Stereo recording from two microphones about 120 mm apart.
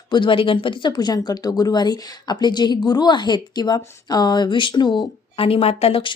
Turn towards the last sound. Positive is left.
turn(degrees=55)  # may be behind; listen again after turning